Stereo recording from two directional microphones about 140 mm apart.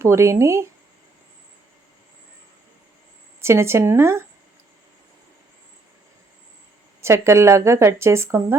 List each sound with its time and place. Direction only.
0.0 s a woman's voice: 20° right (ahead or behind)
3.4 s a woman's voice: 20° right (ahead or behind)
7.0 s a woman's voice: 20° right (ahead or behind)